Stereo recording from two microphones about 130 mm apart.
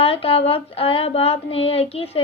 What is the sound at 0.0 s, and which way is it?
Speech, 45° left (ahead or behind).